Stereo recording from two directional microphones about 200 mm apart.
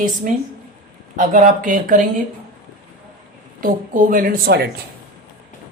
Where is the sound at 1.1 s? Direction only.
40° right (ahead or behind).